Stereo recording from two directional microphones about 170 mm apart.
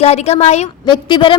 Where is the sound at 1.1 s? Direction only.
30° left (ahead or behind).